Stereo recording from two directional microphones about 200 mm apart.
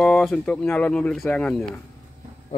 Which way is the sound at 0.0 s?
5° left (ahead or behind).